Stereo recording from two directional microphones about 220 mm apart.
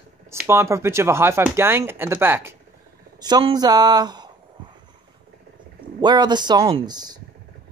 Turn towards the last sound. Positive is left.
turn(degrees=-20)  # may be behind; listen again after turning